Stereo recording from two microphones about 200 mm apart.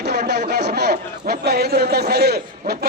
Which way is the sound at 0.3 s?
55° right (ahead or behind).